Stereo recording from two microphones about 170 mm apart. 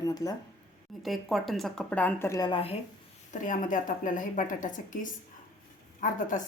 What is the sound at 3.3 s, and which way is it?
A woman's voice, 50° left (ahead or behind).